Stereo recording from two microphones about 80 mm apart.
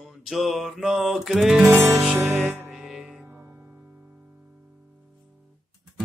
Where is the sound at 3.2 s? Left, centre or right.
Right.